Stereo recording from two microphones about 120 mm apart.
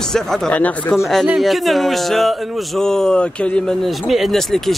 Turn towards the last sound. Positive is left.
turn(degrees=0)  # may be behind; listen again after turning